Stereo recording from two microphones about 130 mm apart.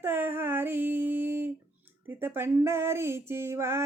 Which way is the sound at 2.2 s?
20° right (ahead or behind).